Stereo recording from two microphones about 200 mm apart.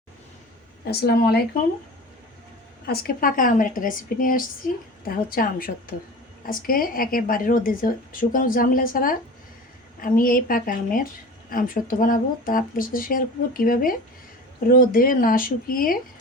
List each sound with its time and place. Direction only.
0.9 s a woman's voice: 50° left (ahead or behind)
2.8 s a woman's voice: 50° left (ahead or behind)